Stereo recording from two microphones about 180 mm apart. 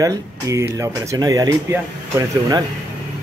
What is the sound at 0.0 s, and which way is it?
Speech, 20° right (ahead or behind).